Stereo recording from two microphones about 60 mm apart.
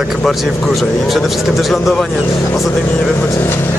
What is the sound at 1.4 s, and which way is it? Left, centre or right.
Speech, centre.